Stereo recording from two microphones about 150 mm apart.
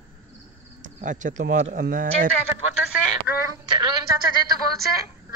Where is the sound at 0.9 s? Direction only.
55° right (ahead or behind).